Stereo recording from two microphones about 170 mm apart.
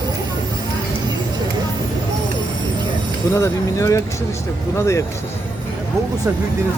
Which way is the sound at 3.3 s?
15° left (ahead or behind).